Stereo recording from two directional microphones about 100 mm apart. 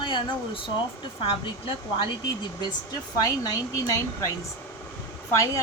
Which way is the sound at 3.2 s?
40° left (ahead or behind).